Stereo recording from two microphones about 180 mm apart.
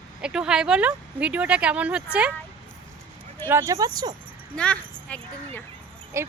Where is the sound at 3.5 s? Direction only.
15° right (ahead or behind).